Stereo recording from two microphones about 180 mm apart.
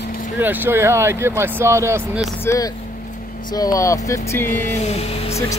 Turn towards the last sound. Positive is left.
turn(degrees=15)  # may be behind; listen again after turning